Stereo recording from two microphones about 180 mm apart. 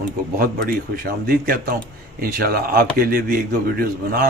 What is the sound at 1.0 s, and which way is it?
A man's voice, 55° right (ahead or behind).